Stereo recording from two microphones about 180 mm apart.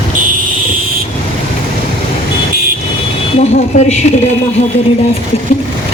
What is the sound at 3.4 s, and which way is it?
Speech, 40° left (ahead or behind).